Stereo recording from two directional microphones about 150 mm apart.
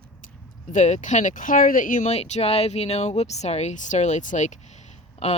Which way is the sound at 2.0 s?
45° left (ahead or behind).